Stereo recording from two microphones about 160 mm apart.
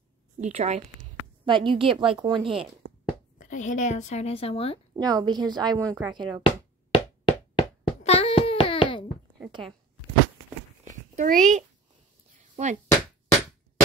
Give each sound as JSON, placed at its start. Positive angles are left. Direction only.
{"t": 0.4, "sound": "a woman's voice", "side_deg": -45}
{"t": 1.4, "sound": "a woman's voice", "side_deg": -30}
{"t": 3.3, "sound": "a woman's voice", "side_deg": 50}
{"t": 4.9, "sound": "a woman's voice", "side_deg": -25}
{"t": 6.4, "sound": "hands", "side_deg": 30}
{"t": 9.5, "sound": "speech", "side_deg": -30}
{"t": 10.9, "sound": "a sound", "side_deg": -50}